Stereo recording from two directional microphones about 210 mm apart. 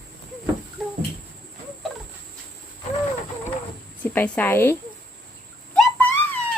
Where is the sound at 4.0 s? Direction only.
5° left (ahead or behind).